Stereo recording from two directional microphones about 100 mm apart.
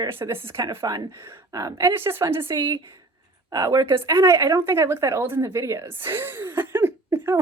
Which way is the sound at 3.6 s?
45° right (ahead or behind).